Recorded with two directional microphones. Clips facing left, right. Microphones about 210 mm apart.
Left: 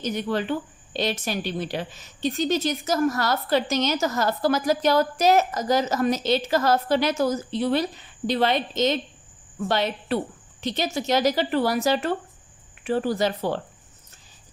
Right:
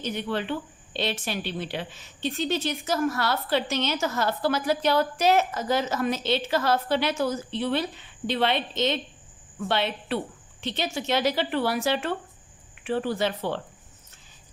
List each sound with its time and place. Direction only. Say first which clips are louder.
0.0 s speech: left 3 dB; 40° left (ahead or behind)